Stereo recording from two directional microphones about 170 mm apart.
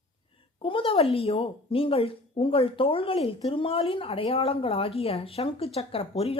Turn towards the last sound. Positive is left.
turn(degrees=35)  # may be behind; listen again after turning